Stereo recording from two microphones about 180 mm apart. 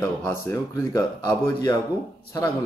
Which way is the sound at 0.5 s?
15° left (ahead or behind).